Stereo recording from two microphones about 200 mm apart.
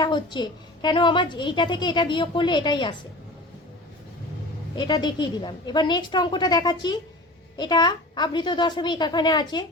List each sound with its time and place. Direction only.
0.0 s a woman's voice: 20° left (ahead or behind)
4.7 s a woman's voice: 20° left (ahead or behind)